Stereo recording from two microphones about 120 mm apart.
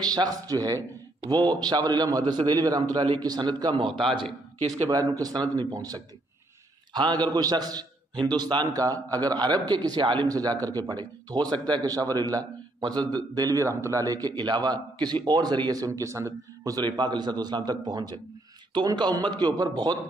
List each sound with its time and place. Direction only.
0.0 s a man's voice: 35° right (ahead or behind)
4.8 s a man's voice: 30° right (ahead or behind)